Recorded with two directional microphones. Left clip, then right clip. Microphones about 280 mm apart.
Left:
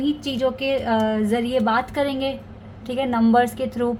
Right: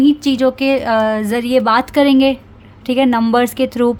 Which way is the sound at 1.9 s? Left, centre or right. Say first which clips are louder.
Right 11 dB; right.